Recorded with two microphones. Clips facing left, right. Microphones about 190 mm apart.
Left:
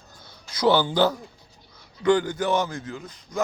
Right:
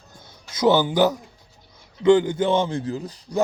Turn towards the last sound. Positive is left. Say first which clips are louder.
# right 5 dB
turn(degrees=-35)  # may be behind; listen again after turning